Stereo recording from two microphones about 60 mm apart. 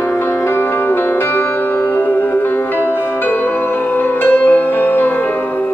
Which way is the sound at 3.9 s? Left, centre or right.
Left.